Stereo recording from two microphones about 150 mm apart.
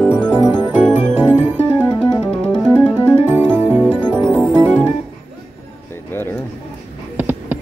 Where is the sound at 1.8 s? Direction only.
10° left (ahead or behind).